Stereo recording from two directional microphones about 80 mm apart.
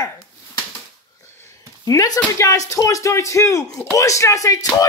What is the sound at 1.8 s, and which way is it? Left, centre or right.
Speech, left.